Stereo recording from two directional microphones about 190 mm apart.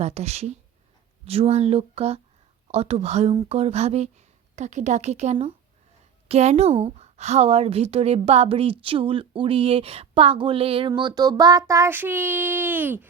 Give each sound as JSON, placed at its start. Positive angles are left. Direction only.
{"t": 0.0, "sound": "a woman's voice", "side_deg": -35}